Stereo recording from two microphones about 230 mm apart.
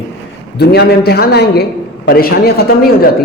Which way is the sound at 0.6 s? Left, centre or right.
Left.